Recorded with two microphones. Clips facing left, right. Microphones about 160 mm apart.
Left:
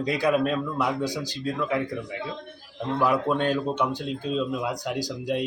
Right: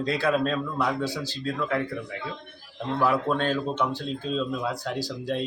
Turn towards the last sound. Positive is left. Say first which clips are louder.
# left 2 dB
turn(degrees=15)  # may be behind; listen again after turning